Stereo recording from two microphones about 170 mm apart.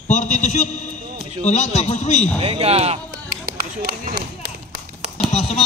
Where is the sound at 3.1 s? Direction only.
60° right (ahead or behind).